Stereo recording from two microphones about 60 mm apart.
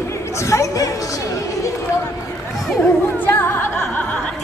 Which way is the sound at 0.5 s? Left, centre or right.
Left.